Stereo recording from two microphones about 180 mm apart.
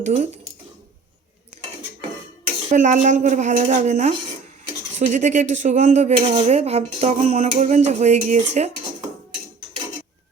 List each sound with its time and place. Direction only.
0.0 s speech: 40° right (ahead or behind)
2.7 s speech: 45° right (ahead or behind)